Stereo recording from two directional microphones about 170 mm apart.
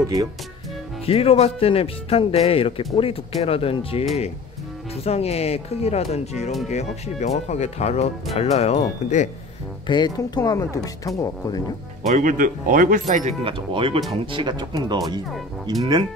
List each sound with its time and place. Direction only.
0.0 s speech: 20° right (ahead or behind)
1.0 s speech: 35° left (ahead or behind)
5.0 s speech: 40° left (ahead or behind)
9.8 s speech: 25° left (ahead or behind)
12.1 s speech: 50° right (ahead or behind)
13.4 s speech: 30° right (ahead or behind)